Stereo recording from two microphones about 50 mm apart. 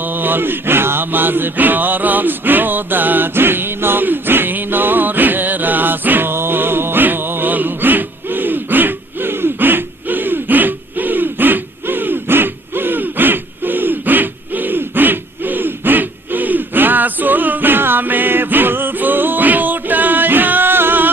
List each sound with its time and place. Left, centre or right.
0.0 s mantra: right